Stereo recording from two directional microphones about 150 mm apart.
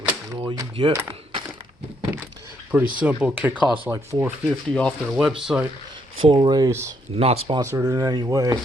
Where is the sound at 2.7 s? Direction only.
10° right (ahead or behind).